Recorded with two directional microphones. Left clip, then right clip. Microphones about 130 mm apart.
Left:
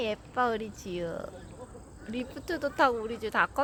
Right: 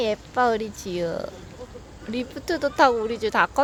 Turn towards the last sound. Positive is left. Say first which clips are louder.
# right 7 dB
turn(degrees=-20)  # may be behind; listen again after turning